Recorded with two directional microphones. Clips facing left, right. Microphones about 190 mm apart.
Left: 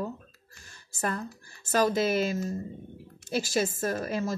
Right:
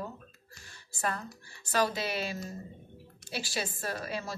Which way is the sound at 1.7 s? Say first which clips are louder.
Left 6 dB; 45° left (ahead or behind).